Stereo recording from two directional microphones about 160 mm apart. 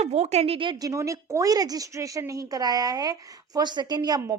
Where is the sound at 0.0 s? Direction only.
40° right (ahead or behind).